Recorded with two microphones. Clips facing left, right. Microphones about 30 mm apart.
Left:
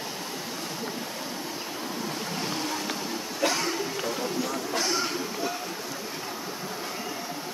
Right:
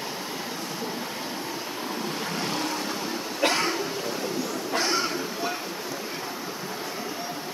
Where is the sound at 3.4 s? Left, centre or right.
Right.